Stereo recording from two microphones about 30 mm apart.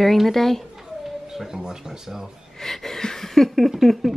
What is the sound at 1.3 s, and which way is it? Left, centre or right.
Speech, centre.